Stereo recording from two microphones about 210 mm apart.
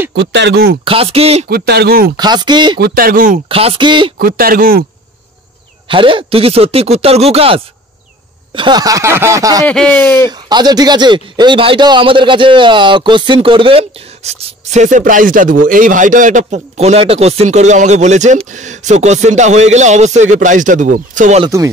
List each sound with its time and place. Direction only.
0.1 s speech: 55° right (ahead or behind)
0.8 s speech: 25° right (ahead or behind)
1.5 s speech: 50° right (ahead or behind)
2.1 s speech: 20° right (ahead or behind)
2.8 s speech: 45° right (ahead or behind)
3.4 s speech: 25° right (ahead or behind)
4.2 s speech: 45° right (ahead or behind)
5.9 s speech: 25° right (ahead or behind)
8.5 s a sound: 20° right (ahead or behind)
9.7 s speech: 5° left (ahead or behind)
10.3 s speech: 20° right (ahead or behind); by 21.5 s 35° right (ahead or behind)